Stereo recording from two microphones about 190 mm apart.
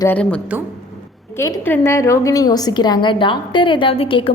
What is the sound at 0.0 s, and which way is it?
A woman's voice, 10° left (ahead or behind).